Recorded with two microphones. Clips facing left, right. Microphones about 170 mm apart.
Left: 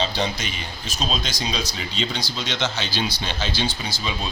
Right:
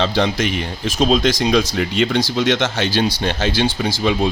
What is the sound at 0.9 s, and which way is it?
Speech, 55° right (ahead or behind).